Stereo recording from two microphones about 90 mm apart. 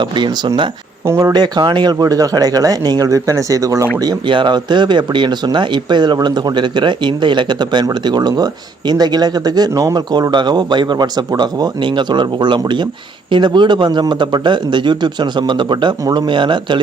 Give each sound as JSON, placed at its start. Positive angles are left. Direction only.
{"t": 0.0, "sound": "a man's voice", "side_deg": -60}
{"t": 1.0, "sound": "speech", "side_deg": -30}
{"t": 1.3, "sound": "speech", "side_deg": -55}
{"t": 4.3, "sound": "a man's voice", "side_deg": -60}